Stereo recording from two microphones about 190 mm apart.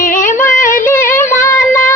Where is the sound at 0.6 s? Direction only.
45° left (ahead or behind).